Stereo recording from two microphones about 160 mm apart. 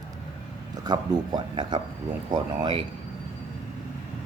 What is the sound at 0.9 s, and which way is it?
A man's voice, 25° right (ahead or behind).